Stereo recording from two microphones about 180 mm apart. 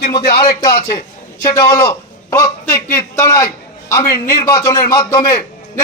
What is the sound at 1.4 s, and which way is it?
A man's voice, 20° left (ahead or behind).